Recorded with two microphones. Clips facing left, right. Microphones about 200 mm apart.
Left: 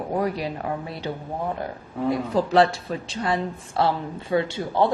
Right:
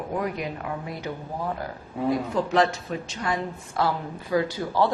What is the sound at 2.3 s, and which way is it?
A woman's voice, 35° left (ahead or behind).